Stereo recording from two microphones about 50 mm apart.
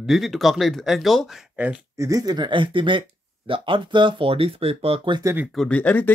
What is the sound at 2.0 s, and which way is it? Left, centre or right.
Speech, right.